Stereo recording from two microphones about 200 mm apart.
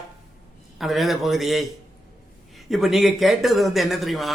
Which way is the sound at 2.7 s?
Centre (ahead or behind).